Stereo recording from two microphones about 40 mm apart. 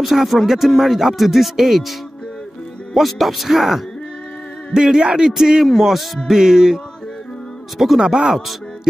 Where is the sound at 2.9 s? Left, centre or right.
Centre.